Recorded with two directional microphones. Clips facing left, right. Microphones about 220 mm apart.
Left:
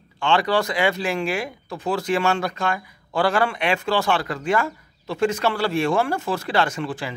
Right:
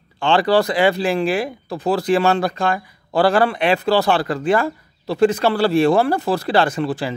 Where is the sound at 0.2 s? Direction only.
35° right (ahead or behind).